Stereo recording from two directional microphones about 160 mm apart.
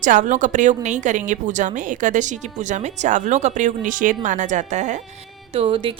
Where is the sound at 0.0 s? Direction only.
50° right (ahead or behind).